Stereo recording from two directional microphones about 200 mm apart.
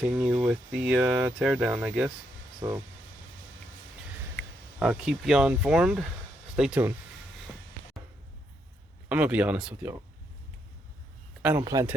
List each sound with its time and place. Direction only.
0.0 s speech: 10° right (ahead or behind)
2.6 s speech: 15° right (ahead or behind)
4.8 s speech: 5° right (ahead or behind)
9.0 s speech: 5° right (ahead or behind)
11.6 s speech: 15° right (ahead or behind)